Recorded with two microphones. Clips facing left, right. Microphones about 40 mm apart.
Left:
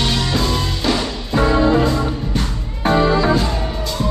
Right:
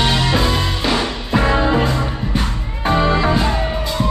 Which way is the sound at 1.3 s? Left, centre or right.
Right.